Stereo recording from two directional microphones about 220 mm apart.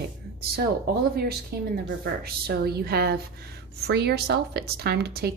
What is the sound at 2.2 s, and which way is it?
A woman's voice, 45° right (ahead or behind).